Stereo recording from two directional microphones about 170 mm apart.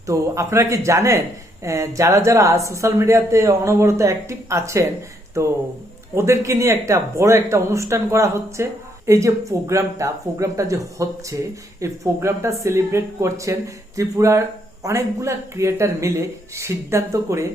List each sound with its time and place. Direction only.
0.1 s speech: 15° right (ahead or behind)
6.1 s speech: 15° right (ahead or behind)